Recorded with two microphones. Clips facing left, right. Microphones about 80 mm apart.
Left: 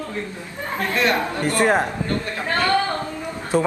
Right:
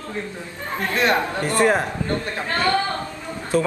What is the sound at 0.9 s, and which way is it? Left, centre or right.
Speech, right.